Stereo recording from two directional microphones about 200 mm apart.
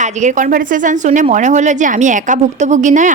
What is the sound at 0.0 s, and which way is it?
A woman's voice, 35° right (ahead or behind).